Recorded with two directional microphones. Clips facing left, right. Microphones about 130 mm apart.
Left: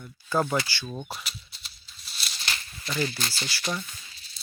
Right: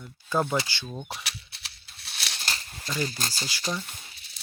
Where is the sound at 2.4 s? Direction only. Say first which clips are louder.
Left 1 dB; 35° right (ahead or behind).